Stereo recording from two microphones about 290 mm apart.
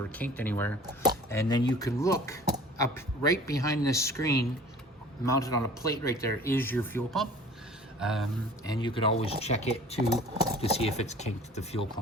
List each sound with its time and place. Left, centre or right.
0.0 s speech: centre
8.7 s speech: centre
10.0 s speech: centre
10.6 s speech: left